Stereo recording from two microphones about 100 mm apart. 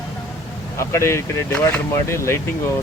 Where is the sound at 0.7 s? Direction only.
25° left (ahead or behind).